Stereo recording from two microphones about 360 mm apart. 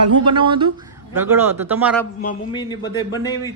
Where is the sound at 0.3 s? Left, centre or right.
Centre.